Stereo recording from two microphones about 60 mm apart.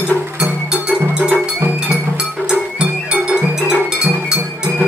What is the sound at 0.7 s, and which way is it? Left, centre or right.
Music, centre.